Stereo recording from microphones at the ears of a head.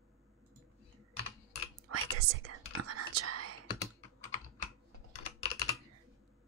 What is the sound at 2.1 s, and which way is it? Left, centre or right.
Whispering, right.